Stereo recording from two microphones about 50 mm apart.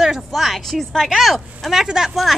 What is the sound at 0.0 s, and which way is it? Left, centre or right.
Speech, centre.